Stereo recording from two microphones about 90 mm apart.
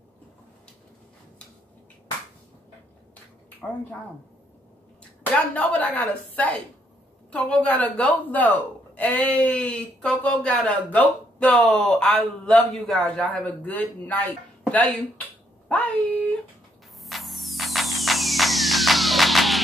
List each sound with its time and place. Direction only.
3.6 s speech: 10° left (ahead or behind)
5.3 s speech: 15° left (ahead or behind)
15.7 s dog: 15° left (ahead or behind)
17.0 s music: centre (ahead or behind)